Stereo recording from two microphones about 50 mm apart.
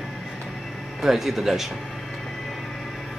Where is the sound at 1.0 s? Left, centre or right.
Centre.